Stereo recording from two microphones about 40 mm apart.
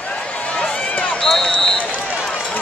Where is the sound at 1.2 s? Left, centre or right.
Centre.